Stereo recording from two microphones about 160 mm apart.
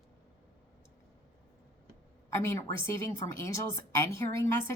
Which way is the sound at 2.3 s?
15° left (ahead or behind).